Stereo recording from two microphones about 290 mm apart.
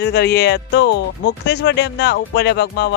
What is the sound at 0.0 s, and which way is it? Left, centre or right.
Speech, left.